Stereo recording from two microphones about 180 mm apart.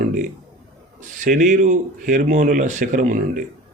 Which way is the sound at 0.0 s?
45° right (ahead or behind).